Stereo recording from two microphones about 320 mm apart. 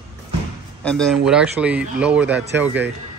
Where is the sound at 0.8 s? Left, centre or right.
Centre.